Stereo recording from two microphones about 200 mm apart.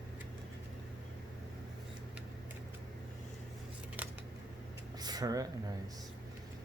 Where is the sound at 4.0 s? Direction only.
10° right (ahead or behind).